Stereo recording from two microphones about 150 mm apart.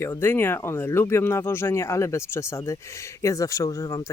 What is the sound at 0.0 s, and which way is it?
Speech, 15° left (ahead or behind).